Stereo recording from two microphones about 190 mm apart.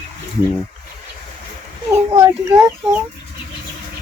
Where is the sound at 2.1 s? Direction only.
15° right (ahead or behind).